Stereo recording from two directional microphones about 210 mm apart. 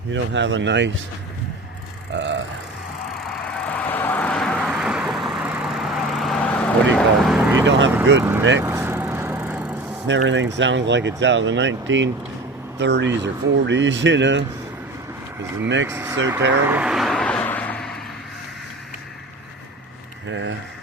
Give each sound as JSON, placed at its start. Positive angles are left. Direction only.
{"t": 0.1, "sound": "speech", "side_deg": -60}
{"t": 2.1, "sound": "speech", "side_deg": -60}
{"t": 3.4, "sound": "vehicle", "side_deg": 5}
{"t": 7.6, "sound": "speech", "side_deg": -60}
{"t": 8.2, "sound": "speech", "side_deg": -10}
{"t": 8.6, "sound": "vehicle", "side_deg": -15}
{"t": 10.1, "sound": "speech", "side_deg": -60}
{"t": 15.6, "sound": "speech", "side_deg": -60}
{"t": 15.9, "sound": "speech", "side_deg": -10}
{"t": 16.6, "sound": "vehicle", "side_deg": -5}
{"t": 20.2, "sound": "speech", "side_deg": -60}